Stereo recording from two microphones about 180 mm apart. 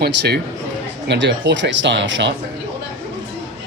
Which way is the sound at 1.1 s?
80° right.